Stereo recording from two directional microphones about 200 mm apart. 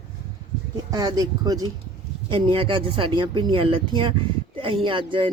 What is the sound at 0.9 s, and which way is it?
A woman's voice, 20° right (ahead or behind).